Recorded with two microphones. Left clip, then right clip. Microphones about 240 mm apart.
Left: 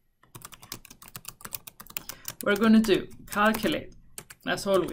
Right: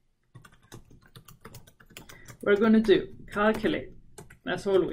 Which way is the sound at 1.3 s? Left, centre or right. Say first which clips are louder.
Left 6 dB; centre.